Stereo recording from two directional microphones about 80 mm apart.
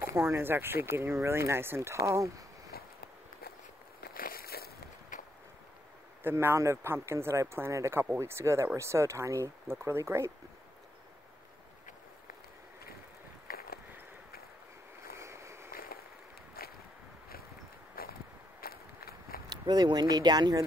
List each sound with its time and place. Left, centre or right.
0.1 s speech: right
6.2 s speech: right
15.1 s a sound: right
19.5 s speech: right